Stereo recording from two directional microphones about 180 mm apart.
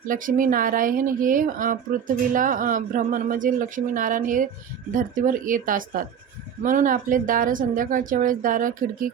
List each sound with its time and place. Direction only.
0.1 s speech: 50° right (ahead or behind)